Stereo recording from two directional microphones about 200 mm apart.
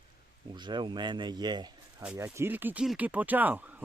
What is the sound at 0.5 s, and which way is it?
Speech, 25° right (ahead or behind).